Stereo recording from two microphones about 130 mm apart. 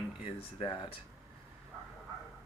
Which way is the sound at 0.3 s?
45° left (ahead or behind).